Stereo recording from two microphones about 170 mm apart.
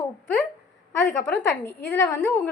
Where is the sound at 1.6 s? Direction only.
15° left (ahead or behind).